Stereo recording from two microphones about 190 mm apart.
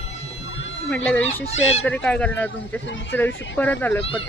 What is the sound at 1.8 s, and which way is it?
Speech, 5° left (ahead or behind).